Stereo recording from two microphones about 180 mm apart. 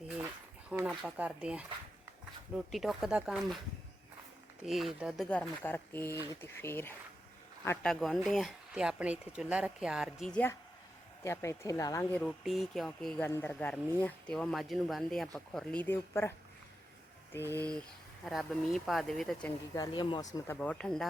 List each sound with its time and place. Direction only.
0.9 s speech: 5° right (ahead or behind)
4.6 s speech: centre (ahead or behind)
11.2 s speech: 15° left (ahead or behind)
12.4 s speech: centre (ahead or behind)
17.3 s speech: 10° left (ahead or behind)
19.7 s speech: 20° left (ahead or behind)
20.3 s speech: 10° left (ahead or behind)